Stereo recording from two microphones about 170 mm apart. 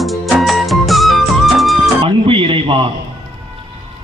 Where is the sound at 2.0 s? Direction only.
30° right (ahead or behind).